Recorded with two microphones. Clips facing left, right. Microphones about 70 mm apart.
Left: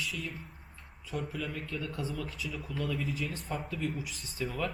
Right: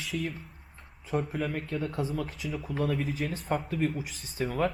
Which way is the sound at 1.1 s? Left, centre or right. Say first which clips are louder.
Right 6 dB; right.